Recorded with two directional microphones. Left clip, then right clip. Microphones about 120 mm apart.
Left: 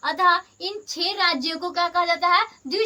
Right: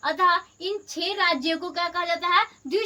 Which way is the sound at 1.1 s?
30° left (ahead or behind).